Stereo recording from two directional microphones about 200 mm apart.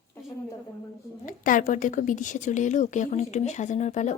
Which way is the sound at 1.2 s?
45° left (ahead or behind).